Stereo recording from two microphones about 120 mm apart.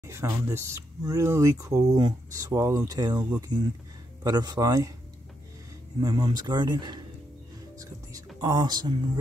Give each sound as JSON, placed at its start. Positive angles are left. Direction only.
{"t": 0.0, "sound": "speech", "side_deg": -25}
{"t": 5.9, "sound": "speech", "side_deg": -35}
{"t": 8.4, "sound": "speech", "side_deg": -30}